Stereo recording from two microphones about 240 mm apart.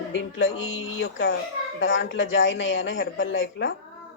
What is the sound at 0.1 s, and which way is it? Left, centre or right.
Speech, left.